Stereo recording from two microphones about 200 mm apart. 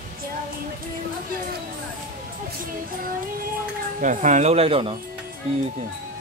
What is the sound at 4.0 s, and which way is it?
Speech, 40° right (ahead or behind).